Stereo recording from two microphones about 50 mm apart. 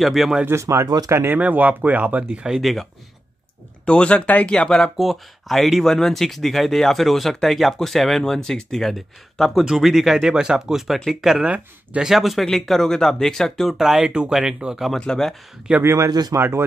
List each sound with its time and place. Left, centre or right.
0.0 s speech: centre
0.6 s speech: right
1.3 s speech: right
2.4 s speech: centre
3.8 s speech: left
4.9 s speech: centre
11.4 s speech: right
12.0 s speech: centre
13.7 s speech: centre
15.0 s speech: centre
15.8 s speech: right